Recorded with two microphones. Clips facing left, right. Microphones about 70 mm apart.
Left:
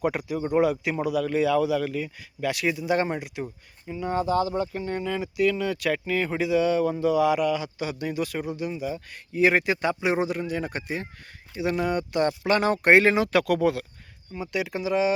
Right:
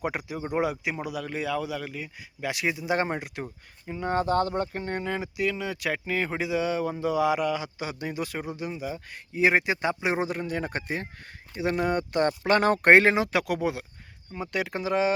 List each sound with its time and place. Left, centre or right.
0.0 s a man's voice: centre
1.9 s a man's voice: centre; by 4.1 s right
4.1 s speech: right
5.4 s a man's voice: right
13.1 s speech: centre
14.3 s speech: right